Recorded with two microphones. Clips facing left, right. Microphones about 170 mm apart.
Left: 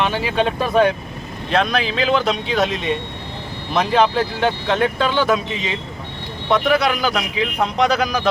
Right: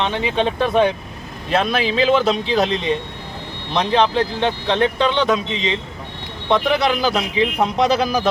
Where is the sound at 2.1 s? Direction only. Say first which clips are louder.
Right 2 dB; centre (ahead or behind).